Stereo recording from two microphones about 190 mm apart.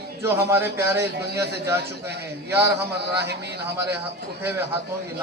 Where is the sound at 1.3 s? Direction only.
60° right (ahead or behind).